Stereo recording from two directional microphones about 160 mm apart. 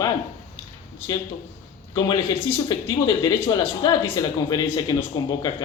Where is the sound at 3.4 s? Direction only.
25° left (ahead or behind).